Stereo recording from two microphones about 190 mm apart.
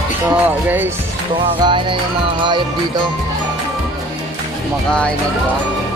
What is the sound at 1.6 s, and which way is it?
Music, 25° right (ahead or behind).